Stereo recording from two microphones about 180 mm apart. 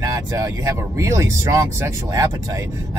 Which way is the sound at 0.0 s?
20° right (ahead or behind).